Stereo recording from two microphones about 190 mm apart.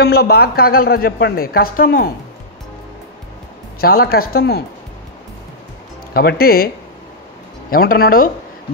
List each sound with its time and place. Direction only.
0.0 s a woman's voice: 55° left (ahead or behind)
3.8 s a woman's voice: 55° left (ahead or behind)
6.1 s a woman's voice: 55° left (ahead or behind)
7.7 s a woman's voice: 50° left (ahead or behind)